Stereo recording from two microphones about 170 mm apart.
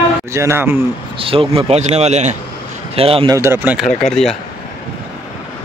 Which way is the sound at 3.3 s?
15° right (ahead or behind).